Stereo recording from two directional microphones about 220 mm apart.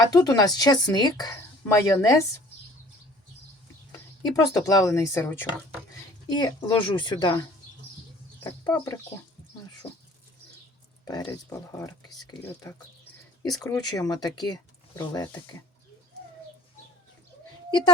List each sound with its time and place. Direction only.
0.0 s a woman's voice: 15° left (ahead or behind)
4.3 s a woman's voice: 10° left (ahead or behind)
8.4 s a woman's voice: 10° left (ahead or behind)
11.0 s a woman's voice: 15° left (ahead or behind)
17.7 s a child's voice: 20° left (ahead or behind)